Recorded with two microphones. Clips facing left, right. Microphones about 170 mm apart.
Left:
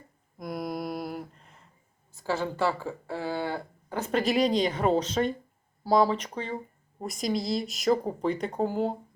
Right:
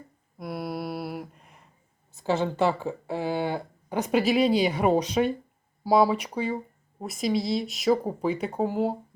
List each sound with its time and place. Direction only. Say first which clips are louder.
0.3 s a sound: right 1 dB; 5° right (ahead or behind)
2.1 s speech: right 4 dB; 20° right (ahead or behind)
4.2 s speech: right 2 dB; 5° right (ahead or behind)